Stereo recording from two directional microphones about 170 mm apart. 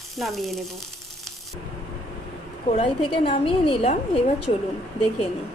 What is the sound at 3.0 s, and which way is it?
A woman's voice, 30° left (ahead or behind).